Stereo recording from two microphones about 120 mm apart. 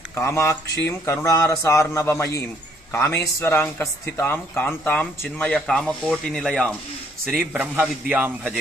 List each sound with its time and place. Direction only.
0.1 s a man's voice: 25° left (ahead or behind); by 6.7 s 5° left (ahead or behind)
7.3 s a man's voice: 10° right (ahead or behind)